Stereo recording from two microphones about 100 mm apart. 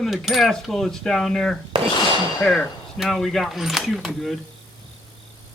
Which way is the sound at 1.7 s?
60° right (ahead or behind).